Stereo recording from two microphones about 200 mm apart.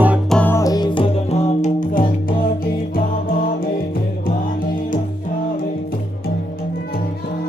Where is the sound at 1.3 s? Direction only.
35° left (ahead or behind).